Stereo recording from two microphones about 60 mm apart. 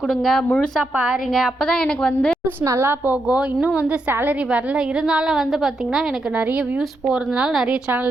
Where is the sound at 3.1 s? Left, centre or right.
Right.